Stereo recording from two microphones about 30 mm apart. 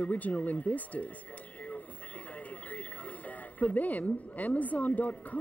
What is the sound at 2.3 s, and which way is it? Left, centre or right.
Speech, left.